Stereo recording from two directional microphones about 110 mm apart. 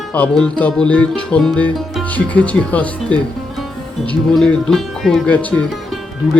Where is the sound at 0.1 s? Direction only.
10° left (ahead or behind).